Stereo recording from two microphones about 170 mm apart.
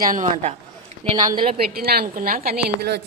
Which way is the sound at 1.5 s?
65° right (ahead or behind).